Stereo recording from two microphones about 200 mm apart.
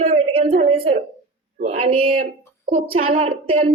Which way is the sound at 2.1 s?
40° right (ahead or behind).